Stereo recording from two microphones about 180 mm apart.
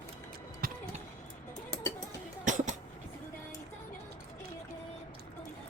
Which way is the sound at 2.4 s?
45° right (ahead or behind).